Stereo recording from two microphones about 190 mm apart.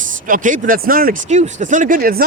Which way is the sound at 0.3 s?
45° right (ahead or behind).